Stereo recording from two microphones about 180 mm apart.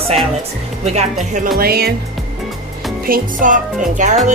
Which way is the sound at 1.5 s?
60° right (ahead or behind).